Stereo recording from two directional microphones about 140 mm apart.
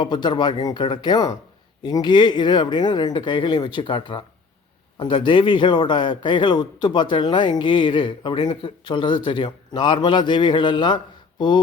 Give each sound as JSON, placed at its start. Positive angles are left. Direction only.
{"t": 0.0, "sound": "a man's voice", "side_deg": 30}